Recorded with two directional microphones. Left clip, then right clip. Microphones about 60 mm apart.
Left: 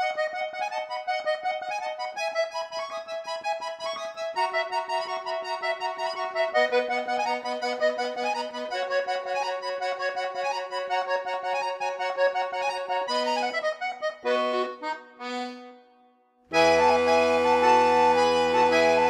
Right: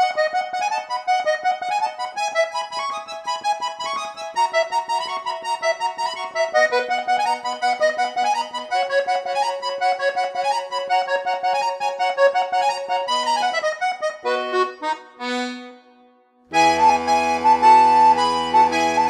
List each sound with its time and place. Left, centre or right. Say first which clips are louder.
0.0 s accordion: right 8 dB; left
2.1 s music: right 7 dB; left
5.1 s accordion: right 5 dB; left
13.6 s accordion: right 7 dB; left
14.2 s accordion: right 4 dB; left
16.5 s music: right 5 dB; left